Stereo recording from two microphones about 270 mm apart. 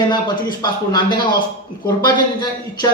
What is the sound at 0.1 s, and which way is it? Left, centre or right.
A man's voice, centre.